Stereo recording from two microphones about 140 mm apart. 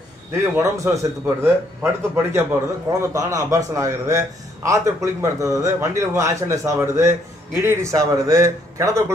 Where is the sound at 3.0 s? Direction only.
20° right (ahead or behind).